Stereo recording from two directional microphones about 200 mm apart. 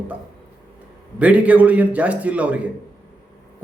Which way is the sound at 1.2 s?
5° right (ahead or behind).